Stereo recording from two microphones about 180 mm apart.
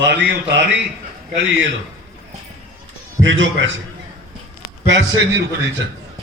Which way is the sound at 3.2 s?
90° right.